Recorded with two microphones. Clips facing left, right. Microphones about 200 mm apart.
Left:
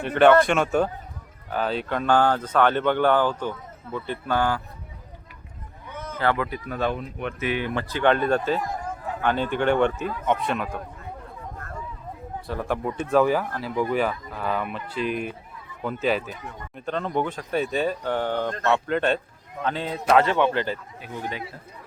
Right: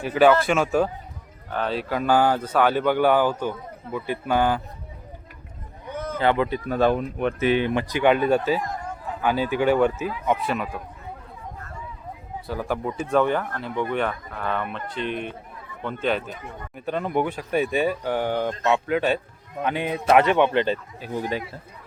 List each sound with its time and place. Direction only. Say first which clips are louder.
0.0 s speech: left 1 dB; 5° right (ahead or behind)
6.1 s speech: right 3 dB; 20° right (ahead or behind)
6.7 s speech: right 8 dB; 35° right (ahead or behind); by 10.8 s 5° right (ahead or behind)
12.5 s speech: even; centre (ahead or behind)
19.6 s speech: right 2 dB; 15° right (ahead or behind)
21.0 s speech: right 5 dB; 35° right (ahead or behind)